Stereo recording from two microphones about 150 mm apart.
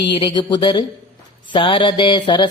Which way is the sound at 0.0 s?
30° left (ahead or behind).